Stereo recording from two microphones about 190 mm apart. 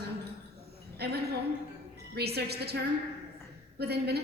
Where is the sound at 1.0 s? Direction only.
60° right (ahead or behind).